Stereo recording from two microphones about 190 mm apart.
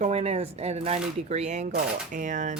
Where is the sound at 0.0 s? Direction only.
35° right (ahead or behind).